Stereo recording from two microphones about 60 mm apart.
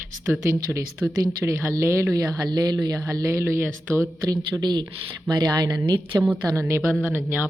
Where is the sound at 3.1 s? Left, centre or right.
Right.